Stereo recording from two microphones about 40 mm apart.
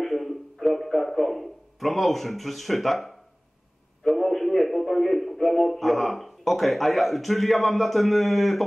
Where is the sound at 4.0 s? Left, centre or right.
Centre.